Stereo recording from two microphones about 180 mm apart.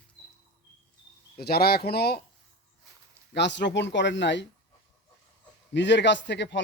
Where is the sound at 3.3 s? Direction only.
75° left (ahead or behind).